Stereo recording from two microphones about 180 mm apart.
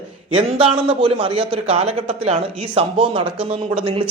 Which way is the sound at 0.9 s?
30° right (ahead or behind).